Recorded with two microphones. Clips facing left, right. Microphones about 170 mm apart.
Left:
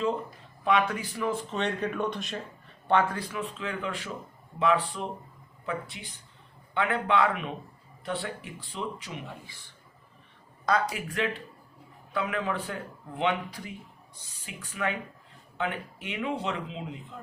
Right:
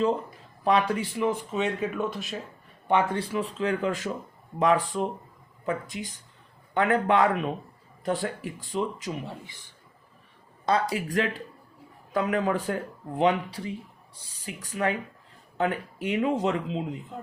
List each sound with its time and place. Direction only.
0.6 s speech: 35° right (ahead or behind)
1.5 s speech: 5° right (ahead or behind)
2.8 s speech: 20° right (ahead or behind); by 9.3 s 40° right (ahead or behind)
10.7 s speech: 25° right (ahead or behind)